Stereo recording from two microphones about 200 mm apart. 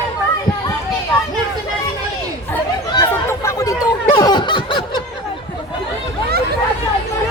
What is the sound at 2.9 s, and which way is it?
Fowl, 15° left (ahead or behind).